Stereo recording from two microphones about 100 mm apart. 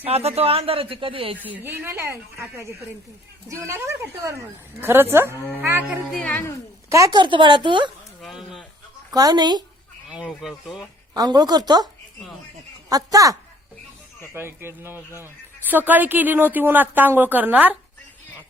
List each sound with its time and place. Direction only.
0.0 s speech: 90° right; by 1.4 s 65° right (ahead or behind)
1.5 s speech: 20° right (ahead or behind)
6.1 s speech: 15° left (ahead or behind)
7.1 s a woman's voice: 55° right (ahead or behind)
8.2 s speech: 5° right (ahead or behind)
9.1 s a woman's voice: 45° right (ahead or behind)
10.1 s speech: 5° right (ahead or behind)
11.1 s a woman's voice: 40° right (ahead or behind)
12.9 s speech: 35° right (ahead or behind)
14.3 s speech: 25° right (ahead or behind)